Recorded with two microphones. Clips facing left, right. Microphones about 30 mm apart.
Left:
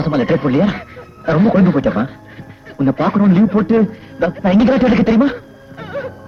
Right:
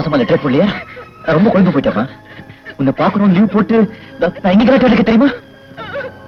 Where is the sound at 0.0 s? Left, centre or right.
Right.